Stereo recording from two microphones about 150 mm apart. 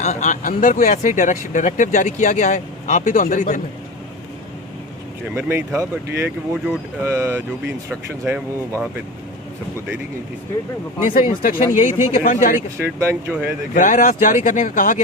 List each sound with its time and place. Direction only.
0.0 s speech: 50° left (ahead or behind)
5.3 s speech: 15° right (ahead or behind)
11.0 s speech: 65° left (ahead or behind)
12.8 s speech: 15° right (ahead or behind)
13.7 s speech: 60° left (ahead or behind)